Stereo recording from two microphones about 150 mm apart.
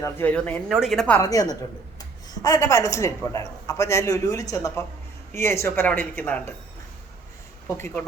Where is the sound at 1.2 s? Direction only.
25° left (ahead or behind).